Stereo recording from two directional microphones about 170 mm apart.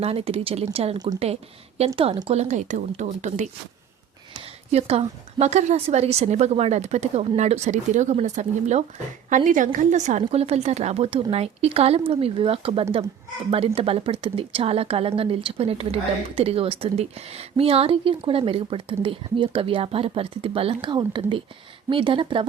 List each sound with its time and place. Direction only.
0.0 s speech: 35° right (ahead or behind)
2.0 s speech: 30° right (ahead or behind)
4.7 s speech: 40° right (ahead or behind)